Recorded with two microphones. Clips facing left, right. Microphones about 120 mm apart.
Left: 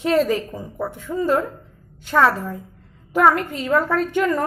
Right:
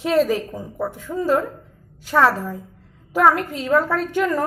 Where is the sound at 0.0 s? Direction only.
Centre (ahead or behind).